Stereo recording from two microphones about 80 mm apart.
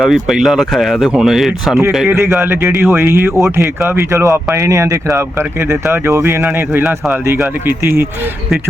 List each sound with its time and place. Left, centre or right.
0.0 s speech: centre
2.1 s speech: right